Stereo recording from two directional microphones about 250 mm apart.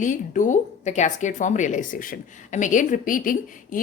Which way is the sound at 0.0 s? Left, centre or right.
Left.